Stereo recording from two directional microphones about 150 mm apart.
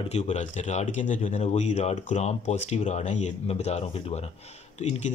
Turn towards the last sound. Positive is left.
turn(degrees=45)  # may be behind; listen again after turning